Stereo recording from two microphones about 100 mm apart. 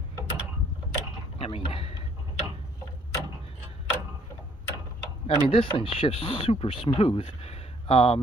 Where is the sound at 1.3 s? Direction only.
65° left (ahead or behind).